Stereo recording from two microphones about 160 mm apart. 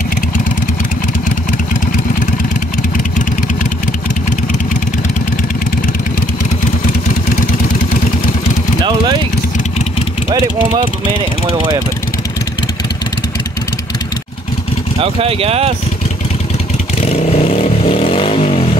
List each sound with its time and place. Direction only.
8.8 s vehicle: 30° right (ahead or behind)
11.1 s speech: 35° right (ahead or behind)
15.0 s speech: 35° right (ahead or behind)
17.0 s vehicle: 40° left (ahead or behind)